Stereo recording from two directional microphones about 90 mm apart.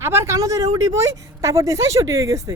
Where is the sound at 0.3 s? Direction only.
40° right (ahead or behind).